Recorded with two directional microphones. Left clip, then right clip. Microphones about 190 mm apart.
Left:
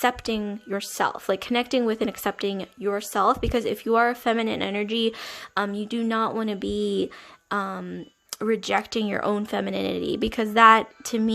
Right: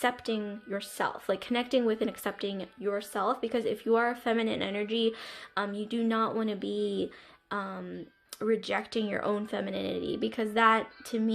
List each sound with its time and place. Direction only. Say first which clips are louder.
0.0 s speech: left 6 dB; 30° left (ahead or behind)